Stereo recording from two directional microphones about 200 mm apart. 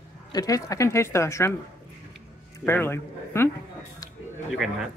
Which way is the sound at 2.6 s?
10° left (ahead or behind).